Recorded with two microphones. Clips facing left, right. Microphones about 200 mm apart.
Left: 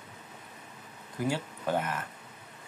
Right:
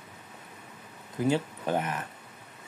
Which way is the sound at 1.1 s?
20° right (ahead or behind).